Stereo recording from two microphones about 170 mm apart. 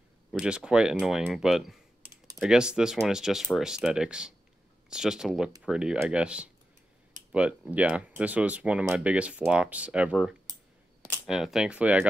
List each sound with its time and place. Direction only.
0.3 s speech: 5° right (ahead or behind)
2.0 s typing: 15° right (ahead or behind)
2.4 s speech: 5° right (ahead or behind)